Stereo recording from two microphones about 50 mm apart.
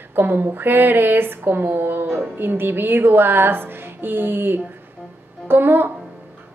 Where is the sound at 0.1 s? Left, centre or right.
Right.